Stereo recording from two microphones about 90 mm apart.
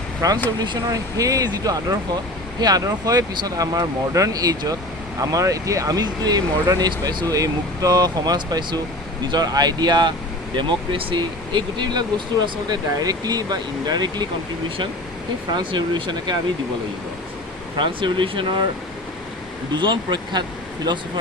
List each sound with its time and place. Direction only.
0.2 s speech: 40° right (ahead or behind)
10.5 s speech: 60° right (ahead or behind)
12.7 s speech: 45° right (ahead or behind)
15.5 s speech: 60° right (ahead or behind)
17.7 s speech: 65° right (ahead or behind)
19.7 s speech: 55° right (ahead or behind)